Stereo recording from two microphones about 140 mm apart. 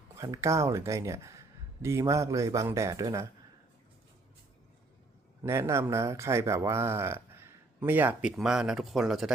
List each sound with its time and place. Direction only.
0.2 s speech: 20° right (ahead or behind)
5.4 s speech: 20° right (ahead or behind); by 9.3 s centre (ahead or behind)